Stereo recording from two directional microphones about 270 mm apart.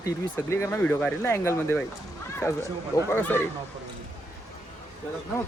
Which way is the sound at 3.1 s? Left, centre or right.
Centre.